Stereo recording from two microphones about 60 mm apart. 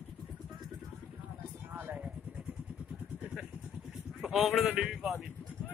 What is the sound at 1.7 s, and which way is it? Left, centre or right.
Vehicle, right.